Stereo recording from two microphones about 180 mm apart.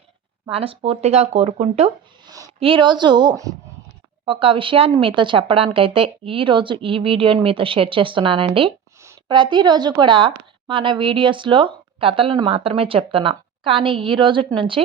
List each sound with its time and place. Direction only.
0.5 s speech: 30° right (ahead or behind)
2.2 s a sound: 20° right (ahead or behind)
2.6 s a woman's voice: 30° right (ahead or behind)